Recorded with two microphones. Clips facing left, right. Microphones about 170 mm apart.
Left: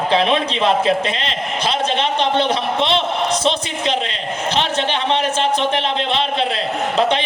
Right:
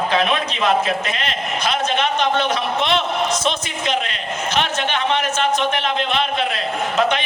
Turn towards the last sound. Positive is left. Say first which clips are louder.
# left 2 dB
turn(degrees=30)  # may be behind; listen again after turning